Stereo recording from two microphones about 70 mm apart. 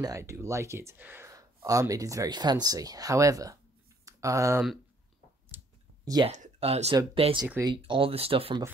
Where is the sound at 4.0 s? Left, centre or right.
Right.